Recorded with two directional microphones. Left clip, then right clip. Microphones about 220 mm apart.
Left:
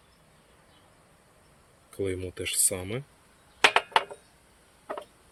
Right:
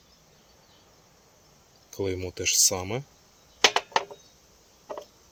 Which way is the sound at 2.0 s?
10° right (ahead or behind).